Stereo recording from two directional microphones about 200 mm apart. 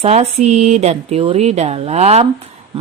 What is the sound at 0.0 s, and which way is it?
A woman's voice, 30° right (ahead or behind).